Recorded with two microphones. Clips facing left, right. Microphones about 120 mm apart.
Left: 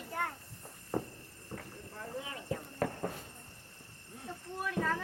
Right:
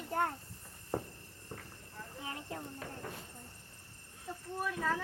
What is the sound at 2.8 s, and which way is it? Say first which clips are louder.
Clip-clop: left 11 dB; 60° left (ahead or behind).